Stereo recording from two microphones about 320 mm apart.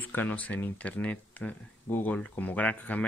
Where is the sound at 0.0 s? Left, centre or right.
Centre.